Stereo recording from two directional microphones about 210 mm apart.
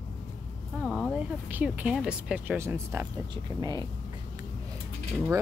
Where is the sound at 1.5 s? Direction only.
10° right (ahead or behind).